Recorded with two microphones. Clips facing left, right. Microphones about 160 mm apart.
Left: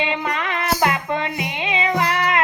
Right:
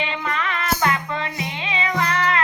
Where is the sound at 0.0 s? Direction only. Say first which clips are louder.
Left 2 dB; 20° left (ahead or behind).